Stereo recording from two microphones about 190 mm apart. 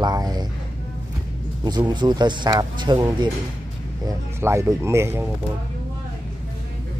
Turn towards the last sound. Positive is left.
turn(degrees=-15)  # may be behind; listen again after turning